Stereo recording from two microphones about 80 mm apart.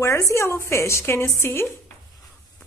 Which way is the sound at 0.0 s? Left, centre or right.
Left.